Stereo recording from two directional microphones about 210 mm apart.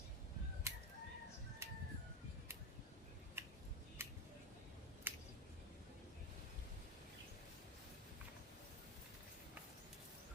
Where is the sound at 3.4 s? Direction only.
10° right (ahead or behind).